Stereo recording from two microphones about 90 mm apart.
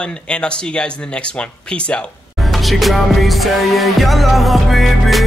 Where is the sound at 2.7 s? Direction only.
Centre (ahead or behind).